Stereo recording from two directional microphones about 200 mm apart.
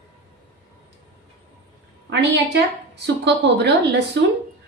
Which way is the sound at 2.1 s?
60° right (ahead or behind).